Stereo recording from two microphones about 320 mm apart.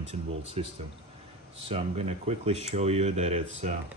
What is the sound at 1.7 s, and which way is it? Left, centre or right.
Speech, centre.